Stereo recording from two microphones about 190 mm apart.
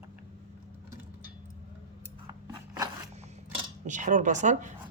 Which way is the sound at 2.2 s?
20° right (ahead or behind).